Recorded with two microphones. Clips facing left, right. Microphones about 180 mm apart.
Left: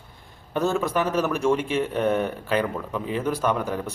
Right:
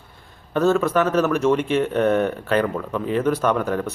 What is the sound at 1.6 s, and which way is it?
Speech, 55° right (ahead or behind).